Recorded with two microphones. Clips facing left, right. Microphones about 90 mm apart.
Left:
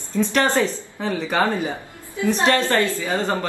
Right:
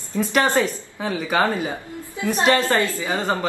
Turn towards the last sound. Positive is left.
turn(degrees=-10)  # may be behind; listen again after turning